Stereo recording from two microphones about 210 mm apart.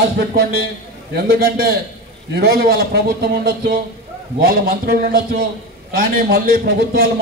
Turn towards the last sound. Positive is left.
turn(degrees=-45)  # may be behind; listen again after turning